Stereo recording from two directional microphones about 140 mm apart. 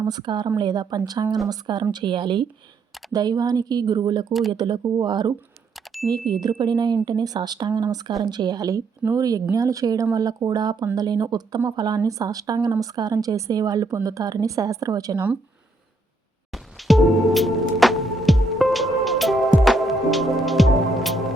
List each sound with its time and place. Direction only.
0.0 s speech: 30° right (ahead or behind)
4.3 s speech: centre (ahead or behind)
4.5 s speech: 30° right (ahead or behind)
16.5 s music: centre (ahead or behind)